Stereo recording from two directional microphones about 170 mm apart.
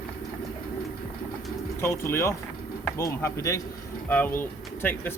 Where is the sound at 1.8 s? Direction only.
15° left (ahead or behind).